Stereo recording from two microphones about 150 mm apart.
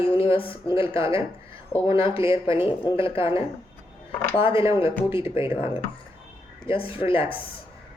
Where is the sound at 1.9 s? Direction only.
35° left (ahead or behind).